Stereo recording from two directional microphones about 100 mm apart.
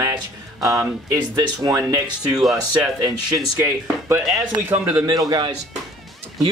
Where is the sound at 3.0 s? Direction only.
40° right (ahead or behind).